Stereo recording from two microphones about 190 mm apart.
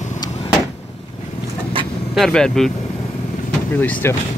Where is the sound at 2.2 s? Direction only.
5° left (ahead or behind).